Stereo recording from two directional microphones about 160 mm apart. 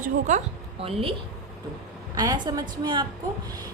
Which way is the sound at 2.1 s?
25° right (ahead or behind).